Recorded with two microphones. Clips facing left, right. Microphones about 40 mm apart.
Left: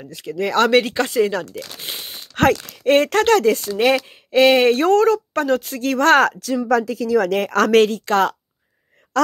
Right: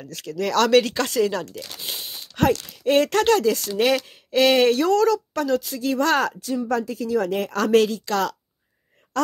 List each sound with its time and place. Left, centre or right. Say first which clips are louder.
0.2 s speech: left 3 dB; left
2.0 s a sound: left 3 dB; left
2.8 s speech: left 3 dB; left
3.7 s speech: left 3 dB; left
6.6 s speech: left 7 dB; left
7.4 s speech: left 3 dB; left
9.1 s a sound: left 5 dB; left